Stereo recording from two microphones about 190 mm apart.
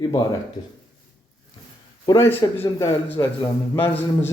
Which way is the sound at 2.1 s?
15° left (ahead or behind).